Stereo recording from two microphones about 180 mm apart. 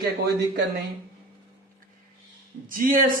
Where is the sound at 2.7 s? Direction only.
50° right (ahead or behind).